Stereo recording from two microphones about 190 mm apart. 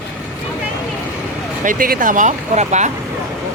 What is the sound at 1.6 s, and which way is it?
Speech, 45° right (ahead or behind).